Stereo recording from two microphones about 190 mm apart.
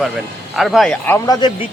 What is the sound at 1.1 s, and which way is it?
Speech, 20° left (ahead or behind).